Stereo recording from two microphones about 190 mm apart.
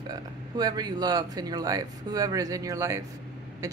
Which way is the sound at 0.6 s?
20° right (ahead or behind).